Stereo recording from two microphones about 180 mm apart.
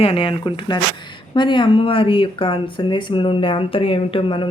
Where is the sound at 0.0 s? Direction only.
30° left (ahead or behind).